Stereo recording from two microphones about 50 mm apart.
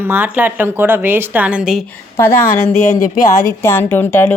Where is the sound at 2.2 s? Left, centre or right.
Left.